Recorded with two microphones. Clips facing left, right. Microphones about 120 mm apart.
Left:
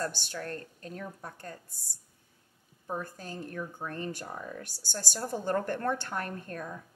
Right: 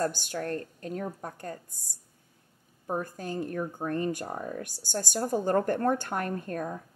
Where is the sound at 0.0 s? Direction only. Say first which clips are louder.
Right 5 dB; 45° right (ahead or behind).